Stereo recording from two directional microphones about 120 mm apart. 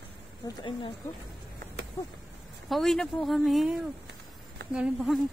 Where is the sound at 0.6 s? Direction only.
40° left (ahead or behind).